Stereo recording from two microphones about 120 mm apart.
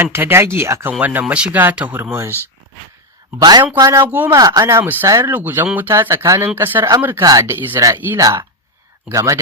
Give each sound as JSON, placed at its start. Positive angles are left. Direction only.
{"t": 0.0, "sound": "speech", "side_deg": -20}
{"t": 3.8, "sound": "speech", "side_deg": -30}
{"t": 4.0, "sound": "speech", "side_deg": -15}
{"t": 4.4, "sound": "speech", "side_deg": -30}
{"t": 4.6, "sound": "speech", "side_deg": -20}
{"t": 5.0, "sound": "speech", "side_deg": -25}
{"t": 5.3, "sound": "speech", "side_deg": -15}
{"t": 7.2, "sound": "speech", "side_deg": -30}
{"t": 7.4, "sound": "speech", "side_deg": -20}